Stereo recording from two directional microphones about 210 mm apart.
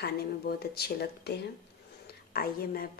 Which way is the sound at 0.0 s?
50° left (ahead or behind).